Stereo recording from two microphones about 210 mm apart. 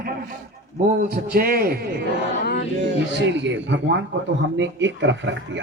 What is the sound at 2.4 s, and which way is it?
Male singing, 55° left (ahead or behind).